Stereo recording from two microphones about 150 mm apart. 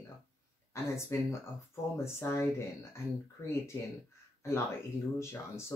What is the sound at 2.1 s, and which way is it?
Speech, 15° left (ahead or behind).